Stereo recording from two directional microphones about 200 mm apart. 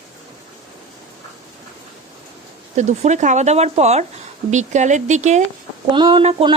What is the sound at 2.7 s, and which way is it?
Speech, 35° right (ahead or behind).